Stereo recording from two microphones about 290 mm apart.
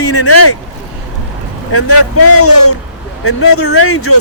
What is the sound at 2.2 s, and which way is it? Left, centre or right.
Speech, left.